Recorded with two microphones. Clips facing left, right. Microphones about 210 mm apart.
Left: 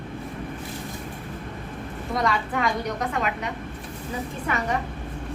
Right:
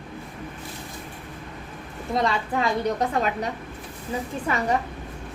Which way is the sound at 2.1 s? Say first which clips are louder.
Right 1 dB; 25° right (ahead or behind).